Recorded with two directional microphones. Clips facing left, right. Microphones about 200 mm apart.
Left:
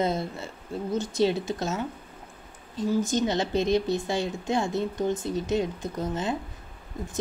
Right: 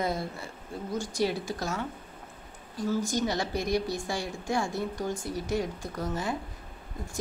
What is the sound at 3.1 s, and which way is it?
Speech, 20° left (ahead or behind).